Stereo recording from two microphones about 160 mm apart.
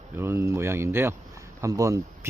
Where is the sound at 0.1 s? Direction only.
15° right (ahead or behind).